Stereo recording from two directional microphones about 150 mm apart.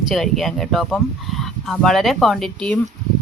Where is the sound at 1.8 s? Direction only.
Centre (ahead or behind).